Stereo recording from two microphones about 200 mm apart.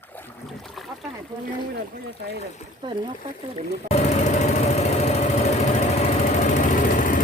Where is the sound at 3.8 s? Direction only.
35° left (ahead or behind).